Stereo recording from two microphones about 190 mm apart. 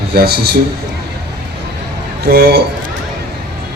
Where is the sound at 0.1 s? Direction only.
55° right (ahead or behind).